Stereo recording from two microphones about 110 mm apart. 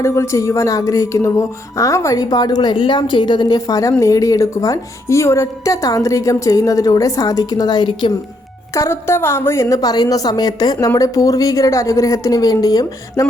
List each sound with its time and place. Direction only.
0.0 s a woman's voice: 25° left (ahead or behind); by 8.1 s 45° left (ahead or behind)
8.7 s a woman's voice: 25° left (ahead or behind)